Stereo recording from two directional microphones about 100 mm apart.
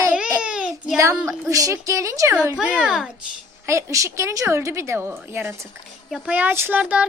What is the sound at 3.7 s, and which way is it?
Speech, 30° right (ahead or behind).